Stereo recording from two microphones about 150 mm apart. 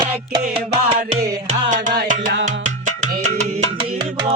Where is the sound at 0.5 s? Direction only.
45° right (ahead or behind).